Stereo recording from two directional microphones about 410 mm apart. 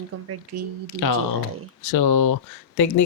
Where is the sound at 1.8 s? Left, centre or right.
Left.